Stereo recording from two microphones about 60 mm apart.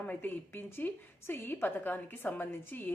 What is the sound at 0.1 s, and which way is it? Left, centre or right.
Speech, left.